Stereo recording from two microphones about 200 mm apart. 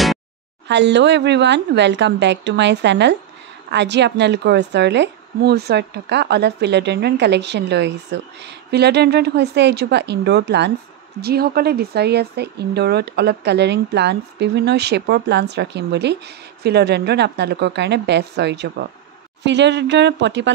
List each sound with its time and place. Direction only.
0.7 s speech: 60° right (ahead or behind)